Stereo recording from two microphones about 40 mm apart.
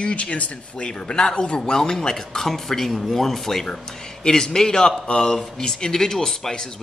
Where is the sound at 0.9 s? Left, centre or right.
Centre.